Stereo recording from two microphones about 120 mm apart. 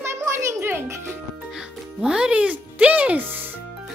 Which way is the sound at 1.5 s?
5° right (ahead or behind).